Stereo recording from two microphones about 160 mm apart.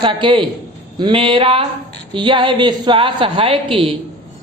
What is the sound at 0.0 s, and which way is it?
A woman's voice, 30° right (ahead or behind).